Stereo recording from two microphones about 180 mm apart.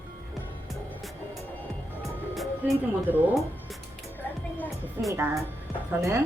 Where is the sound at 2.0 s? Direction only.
Centre (ahead or behind).